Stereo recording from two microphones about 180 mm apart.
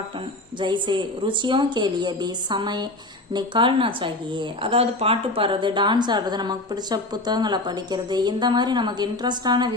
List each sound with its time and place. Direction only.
0.6 s speech: 25° right (ahead or behind)